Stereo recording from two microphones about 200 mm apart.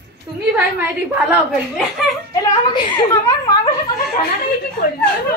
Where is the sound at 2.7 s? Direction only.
20° left (ahead or behind).